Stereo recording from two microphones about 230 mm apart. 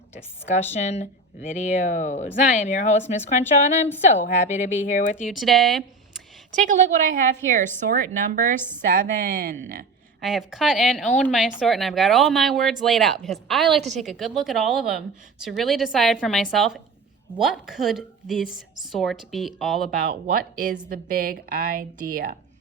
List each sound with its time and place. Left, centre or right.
0.4 s speech: left
3.4 s a woman's voice: centre
4.1 s speech: left
5.3 s speech: centre
6.7 s speech: right
10.2 s a woman's voice: centre
20.3 s speech: right